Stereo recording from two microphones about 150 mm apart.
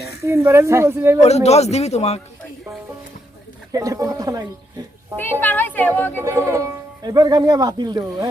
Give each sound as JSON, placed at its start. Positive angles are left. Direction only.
{"t": 0.3, "sound": "a woman's voice", "side_deg": -20}
{"t": 1.2, "sound": "speech", "side_deg": 45}
{"t": 3.7, "sound": "speech", "side_deg": -20}
{"t": 5.1, "sound": "speech", "side_deg": 15}
{"t": 6.2, "sound": "speech", "side_deg": -20}